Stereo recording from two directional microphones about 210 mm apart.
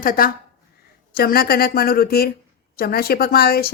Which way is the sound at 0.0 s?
40° left (ahead or behind).